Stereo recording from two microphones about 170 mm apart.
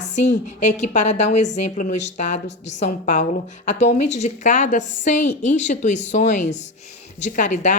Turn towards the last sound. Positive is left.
turn(degrees=45)  # may be behind; listen again after turning